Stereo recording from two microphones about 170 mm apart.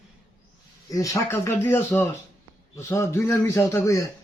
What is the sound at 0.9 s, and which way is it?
A man's voice, 20° left (ahead or behind).